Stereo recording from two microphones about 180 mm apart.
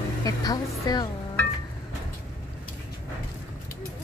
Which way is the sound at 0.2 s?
20° left (ahead or behind).